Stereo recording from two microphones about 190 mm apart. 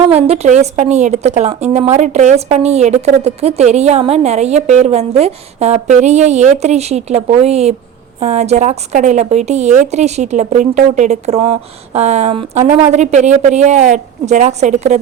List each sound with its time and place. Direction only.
0.1 s a woman's voice: 35° right (ahead or behind)